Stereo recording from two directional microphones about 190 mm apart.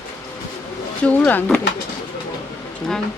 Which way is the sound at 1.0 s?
10° left (ahead or behind).